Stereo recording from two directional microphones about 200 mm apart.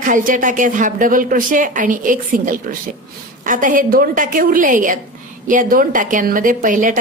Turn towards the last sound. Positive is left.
turn(degrees=-40)  # may be behind; listen again after turning